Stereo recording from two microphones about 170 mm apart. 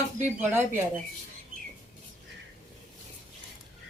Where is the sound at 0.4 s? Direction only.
10° right (ahead or behind).